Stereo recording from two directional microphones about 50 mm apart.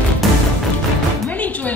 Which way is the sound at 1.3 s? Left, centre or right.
Left.